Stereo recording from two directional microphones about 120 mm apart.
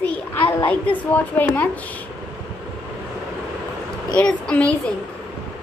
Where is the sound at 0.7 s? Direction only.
15° left (ahead or behind).